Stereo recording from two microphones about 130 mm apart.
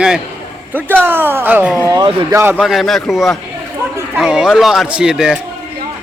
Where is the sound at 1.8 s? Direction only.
30° right (ahead or behind).